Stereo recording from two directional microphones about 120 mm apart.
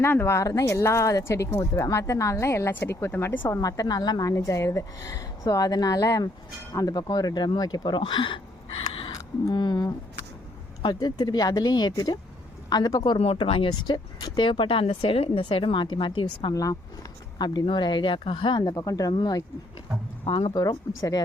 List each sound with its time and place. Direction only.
0.0 s speech: 20° left (ahead or behind)
3.6 s speech: 30° left (ahead or behind)
8.9 s a sound: 45° left (ahead or behind)
10.8 s speech: 35° left (ahead or behind)
13.1 s speech: 55° left (ahead or behind)
16.6 s speech: 30° left (ahead or behind)
18.7 s speech: 30° left (ahead or behind)
20.2 s speech: 45° left (ahead or behind)
20.5 s speech: 30° left (ahead or behind)